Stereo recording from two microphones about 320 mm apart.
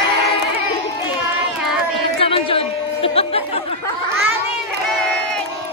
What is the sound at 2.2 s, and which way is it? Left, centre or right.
Chatter, centre.